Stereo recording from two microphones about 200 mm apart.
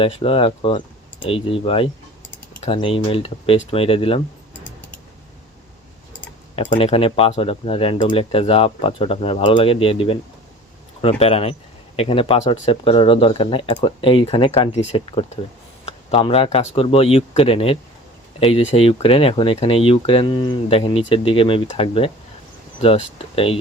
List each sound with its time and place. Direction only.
0.0 s speech: 25° left (ahead or behind)
6.7 s speech: 25° left (ahead or behind)